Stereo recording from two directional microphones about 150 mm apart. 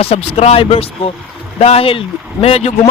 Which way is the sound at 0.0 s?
40° left (ahead or behind).